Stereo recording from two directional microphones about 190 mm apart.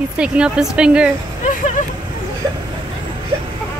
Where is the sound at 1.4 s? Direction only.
45° left (ahead or behind).